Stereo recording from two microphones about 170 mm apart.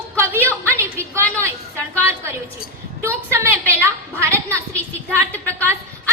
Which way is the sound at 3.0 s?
15° right (ahead or behind).